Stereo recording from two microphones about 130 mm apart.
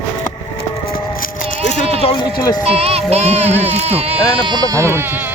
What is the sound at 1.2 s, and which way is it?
Music, 85° left.